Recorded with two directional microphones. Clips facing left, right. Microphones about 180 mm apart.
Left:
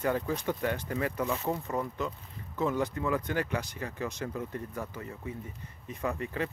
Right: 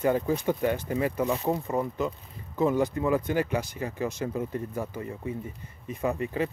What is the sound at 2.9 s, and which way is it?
Speech, 25° right (ahead or behind).